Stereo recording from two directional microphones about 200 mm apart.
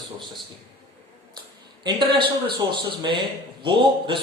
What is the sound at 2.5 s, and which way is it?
Speech, 25° right (ahead or behind).